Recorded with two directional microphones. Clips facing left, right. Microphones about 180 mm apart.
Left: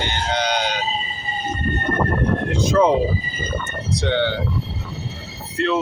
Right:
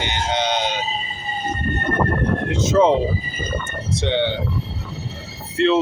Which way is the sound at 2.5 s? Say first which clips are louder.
Right 1 dB; 20° right (ahead or behind).